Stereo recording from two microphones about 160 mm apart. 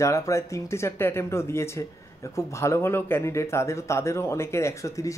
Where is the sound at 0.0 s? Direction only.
20° left (ahead or behind).